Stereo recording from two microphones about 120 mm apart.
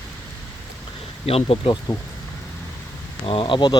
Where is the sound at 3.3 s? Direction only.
45° left (ahead or behind).